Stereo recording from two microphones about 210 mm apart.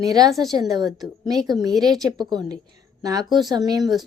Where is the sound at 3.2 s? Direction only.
Centre (ahead or behind).